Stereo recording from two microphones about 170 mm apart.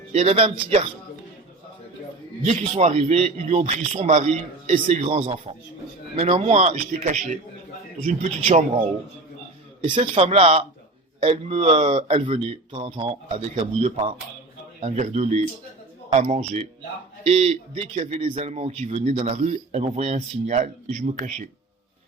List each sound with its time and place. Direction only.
0.1 s a man's voice: 40° right (ahead or behind)
2.4 s a man's voice: 40° right (ahead or behind)
9.8 s a man's voice: 35° right (ahead or behind)